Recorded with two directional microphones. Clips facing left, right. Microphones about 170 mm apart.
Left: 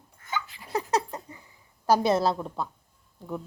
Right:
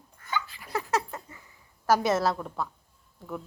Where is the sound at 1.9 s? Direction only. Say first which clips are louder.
Left 2 dB; 30° left (ahead or behind).